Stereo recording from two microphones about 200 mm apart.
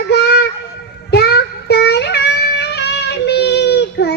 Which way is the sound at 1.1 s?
55° left (ahead or behind).